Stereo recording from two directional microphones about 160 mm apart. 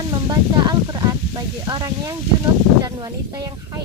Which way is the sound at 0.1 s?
30° right (ahead or behind).